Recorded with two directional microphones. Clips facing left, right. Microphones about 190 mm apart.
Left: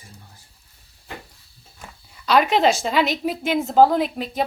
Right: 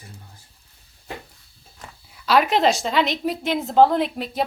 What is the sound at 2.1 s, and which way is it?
A woman's voice, centre (ahead or behind).